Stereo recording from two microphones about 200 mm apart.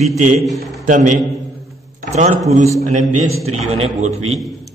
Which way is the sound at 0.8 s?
40° right (ahead or behind).